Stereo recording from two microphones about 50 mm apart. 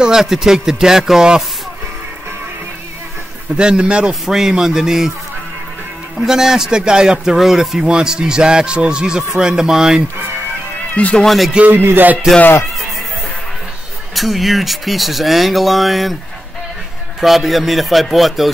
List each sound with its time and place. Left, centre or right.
0.0 s a man's voice: centre
3.5 s speech: centre
4.1 s a man's voice: centre
6.1 s a man's voice: centre
11.2 s speech: centre
11.6 s music: right
14.1 s speech: centre
17.2 s speech: centre